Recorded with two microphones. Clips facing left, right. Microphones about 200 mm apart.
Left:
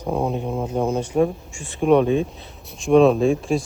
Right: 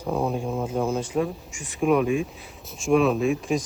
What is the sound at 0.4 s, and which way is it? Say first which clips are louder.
Speech: left 2 dB; 10° left (ahead or behind).